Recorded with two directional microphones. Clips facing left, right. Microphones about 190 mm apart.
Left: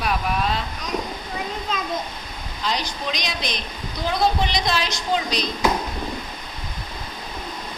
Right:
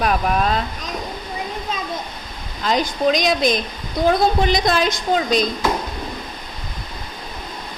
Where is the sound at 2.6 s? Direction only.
45° right (ahead or behind).